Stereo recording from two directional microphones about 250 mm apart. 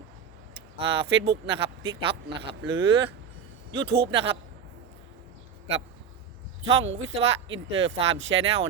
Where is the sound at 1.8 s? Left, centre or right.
Right.